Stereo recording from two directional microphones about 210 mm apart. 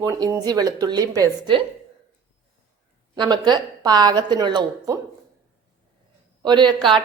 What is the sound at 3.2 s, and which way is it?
A woman's voice, 20° right (ahead or behind).